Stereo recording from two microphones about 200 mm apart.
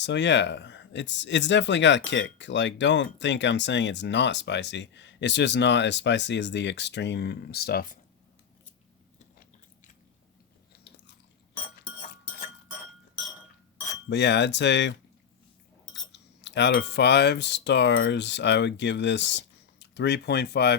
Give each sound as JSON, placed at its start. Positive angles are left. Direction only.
{"t": 0.0, "sound": "speech", "side_deg": 60}
{"t": 10.7, "sound": "biting", "side_deg": 60}
{"t": 14.1, "sound": "speech", "side_deg": 60}